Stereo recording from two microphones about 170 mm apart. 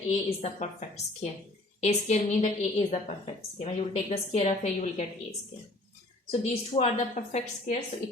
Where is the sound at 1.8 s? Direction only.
40° left (ahead or behind).